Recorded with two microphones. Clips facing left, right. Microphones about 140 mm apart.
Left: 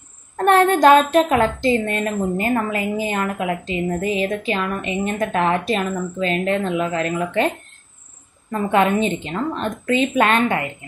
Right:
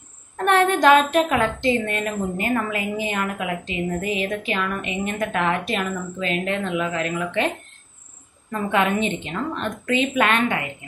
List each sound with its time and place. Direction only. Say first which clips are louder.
0.5 s a woman's voice: left 3 dB; 40° left (ahead or behind)